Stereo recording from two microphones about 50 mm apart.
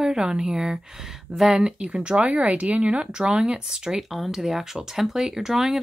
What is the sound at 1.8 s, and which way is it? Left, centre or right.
Speech, right.